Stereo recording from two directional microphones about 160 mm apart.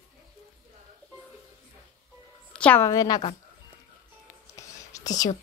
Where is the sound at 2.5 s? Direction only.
10° left (ahead or behind).